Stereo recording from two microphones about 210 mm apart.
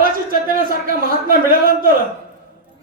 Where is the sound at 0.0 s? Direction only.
40° right (ahead or behind).